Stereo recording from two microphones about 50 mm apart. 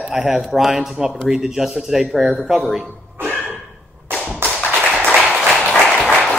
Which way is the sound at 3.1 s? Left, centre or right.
Right.